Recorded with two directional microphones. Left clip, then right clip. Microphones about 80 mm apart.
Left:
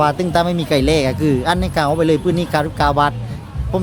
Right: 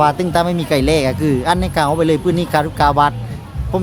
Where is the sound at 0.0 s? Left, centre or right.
Centre.